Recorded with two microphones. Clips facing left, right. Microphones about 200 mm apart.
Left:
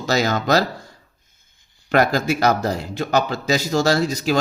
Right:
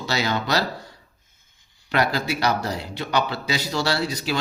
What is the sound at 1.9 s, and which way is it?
Speech, 45° left (ahead or behind).